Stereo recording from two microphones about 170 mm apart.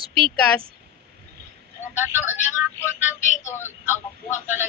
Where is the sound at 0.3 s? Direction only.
5° left (ahead or behind).